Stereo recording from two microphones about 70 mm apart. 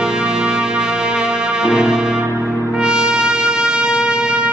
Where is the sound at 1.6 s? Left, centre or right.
Centre.